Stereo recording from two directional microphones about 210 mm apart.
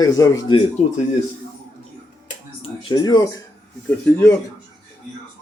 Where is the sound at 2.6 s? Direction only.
20° left (ahead or behind).